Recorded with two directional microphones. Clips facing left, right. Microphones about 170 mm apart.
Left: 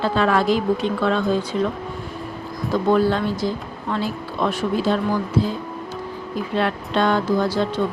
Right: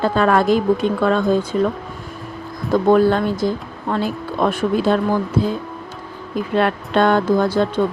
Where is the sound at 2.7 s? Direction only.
50° right (ahead or behind).